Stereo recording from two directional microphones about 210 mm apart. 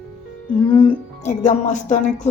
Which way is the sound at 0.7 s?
30° left (ahead or behind).